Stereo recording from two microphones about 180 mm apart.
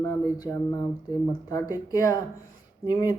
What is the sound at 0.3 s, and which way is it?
Speech, 20° left (ahead or behind).